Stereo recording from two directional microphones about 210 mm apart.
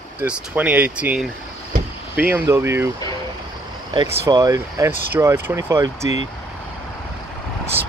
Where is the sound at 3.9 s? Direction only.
15° right (ahead or behind).